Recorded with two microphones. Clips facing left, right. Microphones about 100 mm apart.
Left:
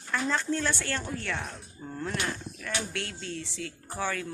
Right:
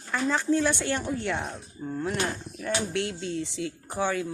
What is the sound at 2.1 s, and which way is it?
Speech, 30° right (ahead or behind).